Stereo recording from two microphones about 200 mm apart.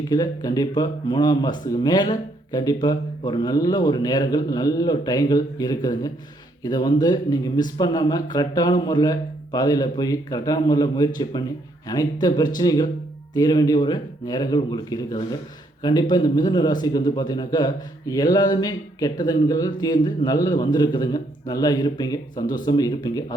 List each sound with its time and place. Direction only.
0.1 s speech: 20° left (ahead or behind)